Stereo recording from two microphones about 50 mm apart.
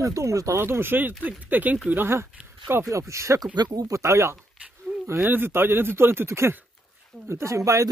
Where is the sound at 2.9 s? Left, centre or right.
Right.